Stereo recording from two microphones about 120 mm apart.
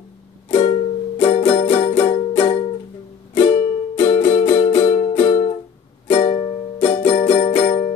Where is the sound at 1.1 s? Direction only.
60° left (ahead or behind).